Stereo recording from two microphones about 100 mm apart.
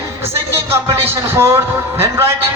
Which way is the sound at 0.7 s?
25° right (ahead or behind).